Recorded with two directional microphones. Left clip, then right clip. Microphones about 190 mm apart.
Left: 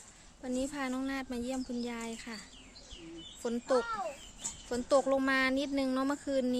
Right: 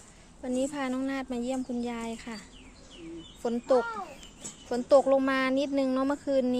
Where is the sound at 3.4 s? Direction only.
20° left (ahead or behind).